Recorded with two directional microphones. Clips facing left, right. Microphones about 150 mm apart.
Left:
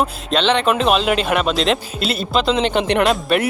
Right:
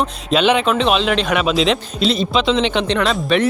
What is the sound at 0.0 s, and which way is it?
A man's voice, 5° right (ahead or behind).